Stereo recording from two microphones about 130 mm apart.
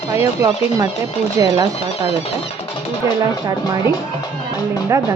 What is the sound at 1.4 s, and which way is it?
Speech, 30° right (ahead or behind).